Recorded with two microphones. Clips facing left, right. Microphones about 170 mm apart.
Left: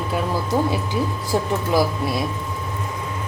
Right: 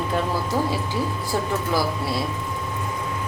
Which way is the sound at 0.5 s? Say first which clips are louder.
Left 4 dB; 20° left (ahead or behind).